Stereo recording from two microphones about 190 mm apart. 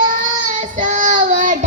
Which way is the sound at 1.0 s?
45° right (ahead or behind).